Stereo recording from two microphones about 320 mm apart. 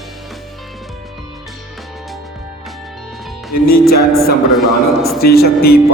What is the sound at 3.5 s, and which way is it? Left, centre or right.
Speech, left.